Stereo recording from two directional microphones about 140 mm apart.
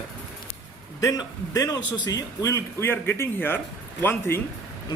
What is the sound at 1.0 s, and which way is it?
A man's voice, 25° left (ahead or behind).